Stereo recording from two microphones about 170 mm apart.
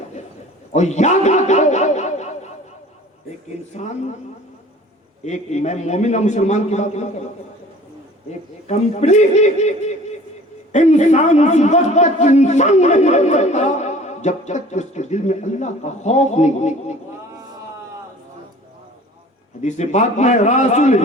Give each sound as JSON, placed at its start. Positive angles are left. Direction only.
{"t": 0.7, "sound": "a sound", "side_deg": 45}
{"t": 5.2, "sound": "a man's voice", "side_deg": 40}
{"t": 8.6, "sound": "a man's voice", "side_deg": 40}
{"t": 19.6, "sound": "a man's voice", "side_deg": 45}